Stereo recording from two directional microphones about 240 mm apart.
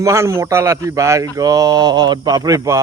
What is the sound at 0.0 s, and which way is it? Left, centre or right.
A man's voice, centre.